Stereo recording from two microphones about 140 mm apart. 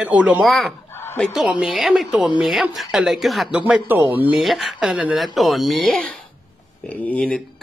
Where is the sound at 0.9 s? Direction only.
15° left (ahead or behind).